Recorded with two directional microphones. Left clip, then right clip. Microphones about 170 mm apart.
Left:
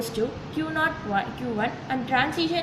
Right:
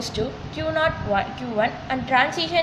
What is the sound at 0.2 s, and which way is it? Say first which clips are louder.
A woman's voice: even; 55° right (ahead or behind).